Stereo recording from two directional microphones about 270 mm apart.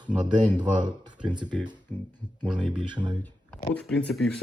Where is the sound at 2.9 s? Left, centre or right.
Centre.